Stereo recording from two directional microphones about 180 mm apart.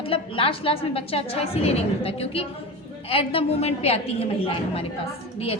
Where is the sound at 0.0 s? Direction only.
30° left (ahead or behind).